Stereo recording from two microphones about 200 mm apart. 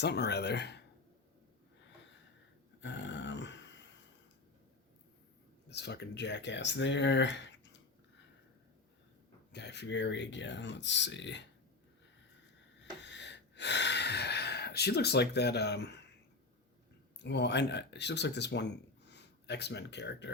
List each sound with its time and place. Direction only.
0.0 s speech: 55° left (ahead or behind)
2.8 s a sound: 65° left (ahead or behind)
5.6 s speech: 55° left (ahead or behind)
9.5 s speech: 55° left (ahead or behind)
12.8 s a sound: 60° left (ahead or behind)
17.2 s speech: 60° left (ahead or behind)